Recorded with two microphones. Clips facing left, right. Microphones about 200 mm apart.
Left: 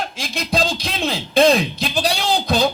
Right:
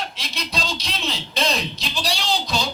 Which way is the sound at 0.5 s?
50° left (ahead or behind).